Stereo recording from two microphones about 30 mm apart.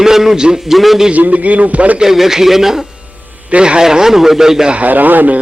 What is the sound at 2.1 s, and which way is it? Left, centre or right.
Speech, centre.